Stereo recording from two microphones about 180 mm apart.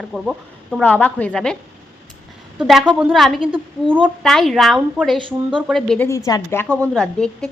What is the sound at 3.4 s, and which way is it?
Speech, 30° right (ahead or behind).